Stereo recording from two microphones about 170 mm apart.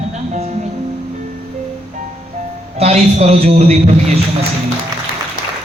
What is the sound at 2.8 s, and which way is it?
A man's voice, 40° right (ahead or behind).